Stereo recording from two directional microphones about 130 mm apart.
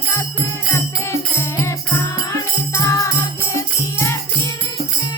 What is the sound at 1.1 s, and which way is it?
Music, 20° left (ahead or behind).